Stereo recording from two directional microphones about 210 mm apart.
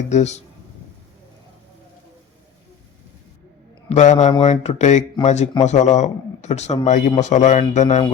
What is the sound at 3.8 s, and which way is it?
Speech, 35° left (ahead or behind).